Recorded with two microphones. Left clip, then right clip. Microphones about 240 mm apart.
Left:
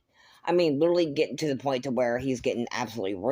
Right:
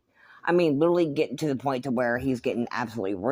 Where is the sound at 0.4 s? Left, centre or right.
Centre.